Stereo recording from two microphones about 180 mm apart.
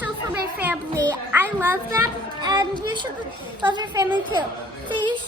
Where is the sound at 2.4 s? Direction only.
20° right (ahead or behind).